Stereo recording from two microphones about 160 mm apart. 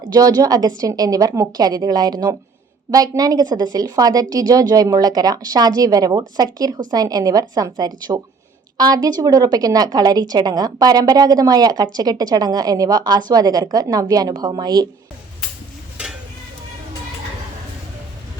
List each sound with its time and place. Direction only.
0.0 s a woman's voice: 25° right (ahead or behind)